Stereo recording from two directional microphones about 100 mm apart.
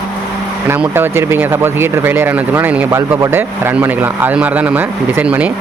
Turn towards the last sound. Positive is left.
turn(degrees=-15)  # may be behind; listen again after turning